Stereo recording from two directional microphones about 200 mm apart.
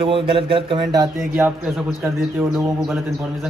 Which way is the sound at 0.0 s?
25° right (ahead or behind).